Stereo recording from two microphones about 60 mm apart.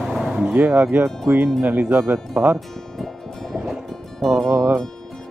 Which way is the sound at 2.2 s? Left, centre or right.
Centre.